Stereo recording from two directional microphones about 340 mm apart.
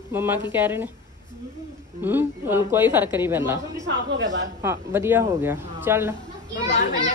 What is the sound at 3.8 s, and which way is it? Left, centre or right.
Speech, right.